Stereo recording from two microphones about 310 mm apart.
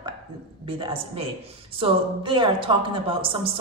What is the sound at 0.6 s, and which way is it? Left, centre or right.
A woman's voice, centre.